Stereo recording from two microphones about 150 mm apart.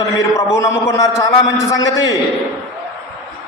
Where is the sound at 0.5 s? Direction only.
20° left (ahead or behind).